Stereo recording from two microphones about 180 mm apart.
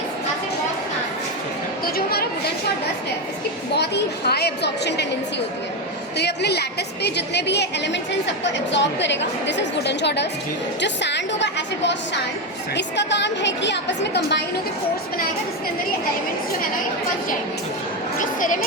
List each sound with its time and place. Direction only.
1.8 s speech: 55° left (ahead or behind)
3.8 s a woman's voice: 65° left (ahead or behind)
6.1 s a woman's voice: 65° left (ahead or behind)
8.3 s a woman's voice: 80° left; by 14.4 s 65° left (ahead or behind)
18.2 s a sound: 45° left (ahead or behind)